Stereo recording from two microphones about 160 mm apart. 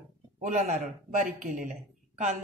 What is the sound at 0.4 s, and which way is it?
A woman's voice, 50° right (ahead or behind).